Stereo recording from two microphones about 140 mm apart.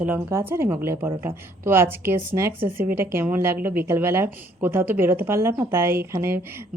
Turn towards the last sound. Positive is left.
turn(degrees=-20)  # may be behind; listen again after turning